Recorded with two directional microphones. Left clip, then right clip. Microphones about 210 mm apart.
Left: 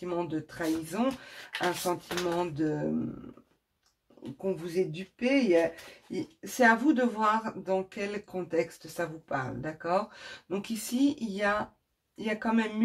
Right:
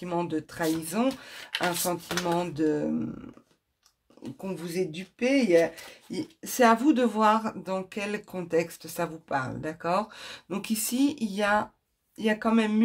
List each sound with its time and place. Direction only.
0.0 s speech: 50° right (ahead or behind)
4.4 s speech: 45° right (ahead or behind)